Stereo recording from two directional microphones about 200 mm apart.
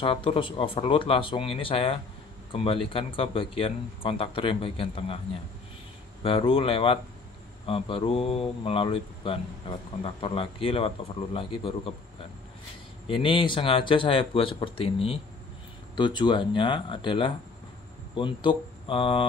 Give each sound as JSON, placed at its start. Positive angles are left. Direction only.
{"t": 0.0, "sound": "speech", "side_deg": 25}
{"t": 6.2, "sound": "speech", "side_deg": 25}
{"t": 13.1, "sound": "speech", "side_deg": 25}